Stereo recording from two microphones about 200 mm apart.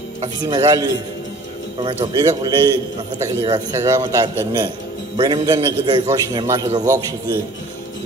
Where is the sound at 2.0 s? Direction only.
20° right (ahead or behind).